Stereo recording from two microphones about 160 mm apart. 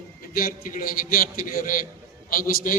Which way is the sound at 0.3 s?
65° left (ahead or behind).